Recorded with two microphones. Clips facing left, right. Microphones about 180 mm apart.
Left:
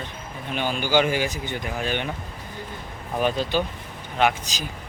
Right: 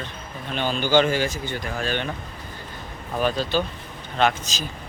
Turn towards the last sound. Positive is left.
turn(degrees=15)  # may be behind; listen again after turning